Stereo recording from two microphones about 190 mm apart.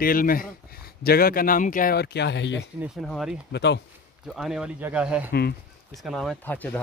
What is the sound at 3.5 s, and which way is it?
Speech, 65° left (ahead or behind).